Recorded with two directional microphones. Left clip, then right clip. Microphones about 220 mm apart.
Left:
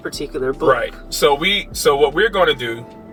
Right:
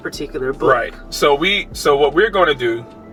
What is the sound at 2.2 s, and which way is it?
Speech, 25° left (ahead or behind).